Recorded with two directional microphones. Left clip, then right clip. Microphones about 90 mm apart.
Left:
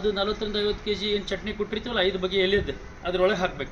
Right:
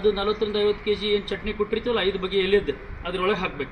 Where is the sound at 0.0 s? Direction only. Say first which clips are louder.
Right 3 dB; 35° left (ahead or behind).